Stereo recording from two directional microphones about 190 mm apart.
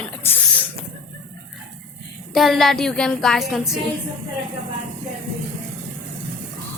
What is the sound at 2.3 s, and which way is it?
A woman's voice, centre (ahead or behind).